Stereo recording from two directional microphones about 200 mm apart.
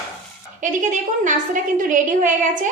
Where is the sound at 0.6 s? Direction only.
40° right (ahead or behind).